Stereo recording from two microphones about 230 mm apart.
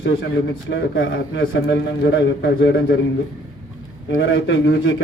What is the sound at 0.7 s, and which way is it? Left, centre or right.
A man's voice, left.